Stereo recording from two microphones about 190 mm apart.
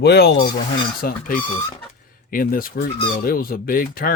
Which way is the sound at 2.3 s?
50° left (ahead or behind).